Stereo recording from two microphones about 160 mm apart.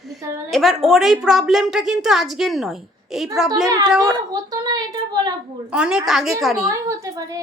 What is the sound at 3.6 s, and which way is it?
A woman's voice, 25° right (ahead or behind).